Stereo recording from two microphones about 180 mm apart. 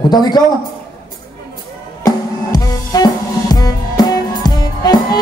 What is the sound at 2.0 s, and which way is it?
Drum kit, 20° left (ahead or behind).